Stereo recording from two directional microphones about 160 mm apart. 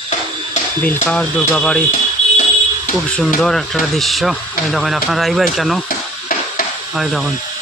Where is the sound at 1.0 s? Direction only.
5° left (ahead or behind).